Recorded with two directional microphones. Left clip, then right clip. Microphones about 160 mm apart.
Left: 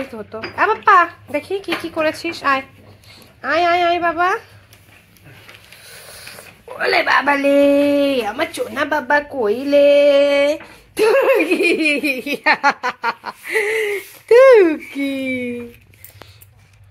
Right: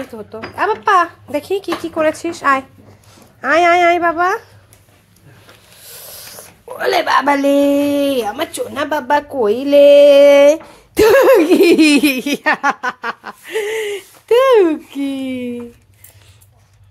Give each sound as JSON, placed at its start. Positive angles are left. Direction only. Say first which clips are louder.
{"t": 0.1, "sound": "speech", "louder": "even", "side_deg": -10}
{"t": 1.3, "sound": "speech", "louder": "right 2 dB", "side_deg": -40}
{"t": 3.3, "sound": "speech", "louder": "right 4 dB", "side_deg": -45}
{"t": 6.7, "sound": "speech", "louder": "right 1 dB", "side_deg": -30}
{"t": 9.0, "sound": "speech", "louder": "right 2 dB", "side_deg": -30}
{"t": 12.0, "sound": "speech", "louder": "right 4 dB", "side_deg": -85}
{"t": 12.4, "sound": "speech", "louder": "left 1 dB", "side_deg": -30}
{"t": 13.5, "sound": "speech", "louder": "left 2 dB", "side_deg": -10}